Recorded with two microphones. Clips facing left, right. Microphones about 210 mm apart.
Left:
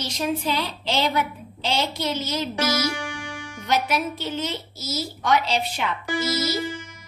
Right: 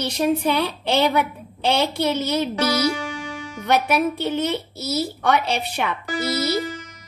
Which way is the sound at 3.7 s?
60° right (ahead or behind).